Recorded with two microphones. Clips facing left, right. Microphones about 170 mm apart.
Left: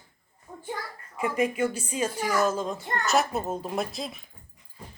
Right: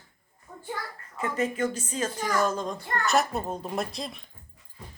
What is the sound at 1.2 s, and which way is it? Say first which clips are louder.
Speech: left 2 dB; 10° left (ahead or behind).